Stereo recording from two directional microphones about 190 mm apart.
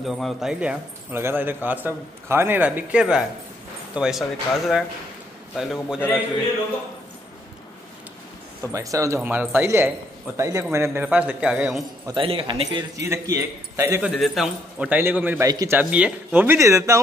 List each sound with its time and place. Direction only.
0.0 s speech: centre (ahead or behind)
8.7 s speech: 15° right (ahead or behind)
12.1 s speech: 30° right (ahead or behind)
13.0 s speech: 15° right (ahead or behind)
14.1 s speech: centre (ahead or behind); by 15.8 s 20° right (ahead or behind)
15.8 s speech: 5° right (ahead or behind)